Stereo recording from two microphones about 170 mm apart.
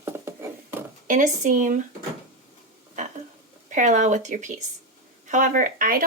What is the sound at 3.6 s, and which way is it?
Speech, 45° right (ahead or behind).